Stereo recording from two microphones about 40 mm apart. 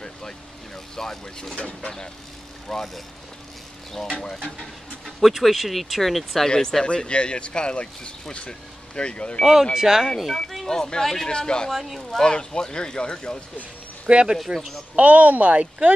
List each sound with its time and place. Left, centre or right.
0.9 s speech: centre
2.7 s speech: centre
4.4 s speech: centre
6.4 s speech: centre
9.4 s speech: centre
10.7 s speech: centre
11.2 s speech: left
11.7 s speech: centre
12.1 s speech: centre
14.0 s speech: right
15.0 s speech: right